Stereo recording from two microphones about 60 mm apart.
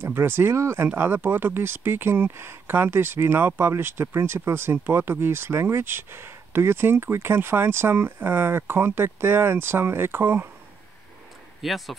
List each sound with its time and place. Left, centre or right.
0.0 s speech: right
11.6 s speech: centre